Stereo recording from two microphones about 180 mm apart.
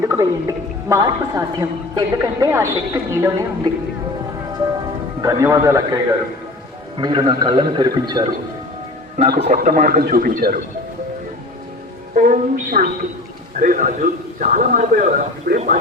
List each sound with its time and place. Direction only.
0.0 s a woman's voice: 15° right (ahead or behind)
5.2 s a woman's voice: 15° right (ahead or behind)
9.5 s speech: 50° right (ahead or behind)
12.1 s a woman's voice: 50° right (ahead or behind)